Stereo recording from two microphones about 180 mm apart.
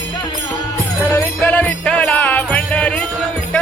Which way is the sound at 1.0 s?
10° left (ahead or behind).